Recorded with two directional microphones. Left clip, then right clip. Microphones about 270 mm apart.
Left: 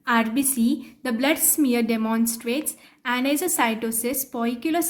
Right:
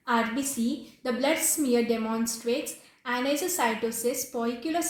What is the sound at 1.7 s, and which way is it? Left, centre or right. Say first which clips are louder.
Speech: left 2 dB; left.